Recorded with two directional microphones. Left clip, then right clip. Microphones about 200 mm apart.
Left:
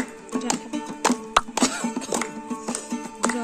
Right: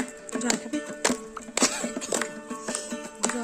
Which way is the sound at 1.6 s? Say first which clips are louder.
Left 2 dB; 20° right (ahead or behind).